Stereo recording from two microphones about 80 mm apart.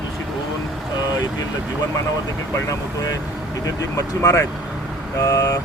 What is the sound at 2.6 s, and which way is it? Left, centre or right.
Speech, left.